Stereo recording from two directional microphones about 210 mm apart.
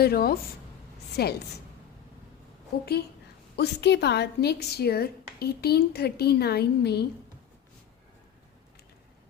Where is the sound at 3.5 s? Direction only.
55° left (ahead or behind).